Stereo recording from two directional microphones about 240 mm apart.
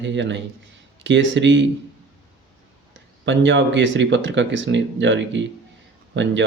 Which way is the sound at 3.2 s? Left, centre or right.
Right.